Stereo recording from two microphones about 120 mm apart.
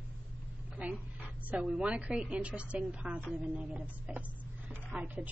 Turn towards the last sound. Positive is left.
turn(degrees=-15)  # may be behind; listen again after turning